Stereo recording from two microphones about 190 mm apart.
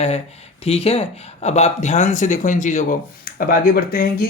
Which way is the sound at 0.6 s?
30° left (ahead or behind).